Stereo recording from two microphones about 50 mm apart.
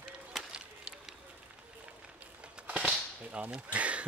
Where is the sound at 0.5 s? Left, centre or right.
Centre.